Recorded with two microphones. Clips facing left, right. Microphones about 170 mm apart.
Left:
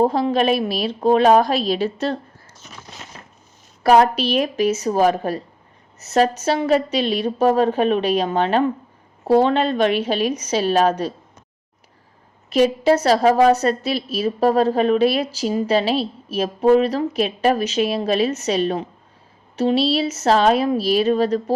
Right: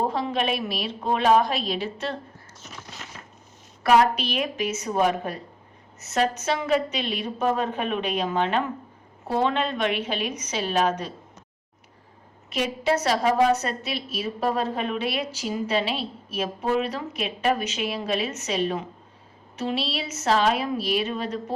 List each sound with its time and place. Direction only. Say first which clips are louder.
0.0 s a woman's voice: left 8 dB; 35° left (ahead or behind)
3.8 s a woman's voice: left 5 dB; 35° left (ahead or behind)
12.5 s a woman's voice: left 9 dB; 35° left (ahead or behind)